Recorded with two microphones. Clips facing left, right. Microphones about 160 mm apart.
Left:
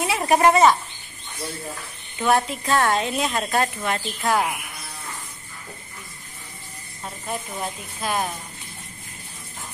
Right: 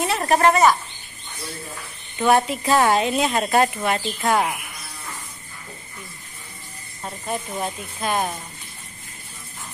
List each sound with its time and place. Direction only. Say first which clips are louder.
0.0 s a woman's voice: even; 10° left (ahead or behind)
2.1 s speech: right 3 dB; centre (ahead or behind)
7.0 s speech: right 3 dB; 5° right (ahead or behind)